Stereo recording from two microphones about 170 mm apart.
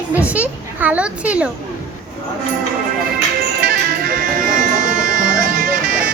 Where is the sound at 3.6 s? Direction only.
60° right (ahead or behind).